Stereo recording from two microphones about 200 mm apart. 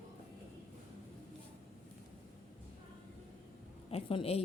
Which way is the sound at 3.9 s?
30° left (ahead or behind).